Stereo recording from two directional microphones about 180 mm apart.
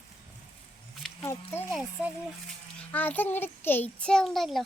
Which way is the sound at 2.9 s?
10° left (ahead or behind).